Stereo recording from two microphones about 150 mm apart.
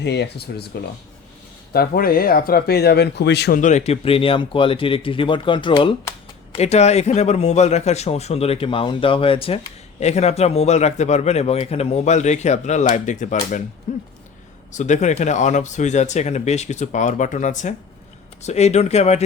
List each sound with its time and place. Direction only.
0.1 s speech: 90° left
1.7 s speech: 85° left
3.6 s speech: 50° left (ahead or behind); by 6.0 s 35° left (ahead or behind)
6.6 s speech: 45° left (ahead or behind)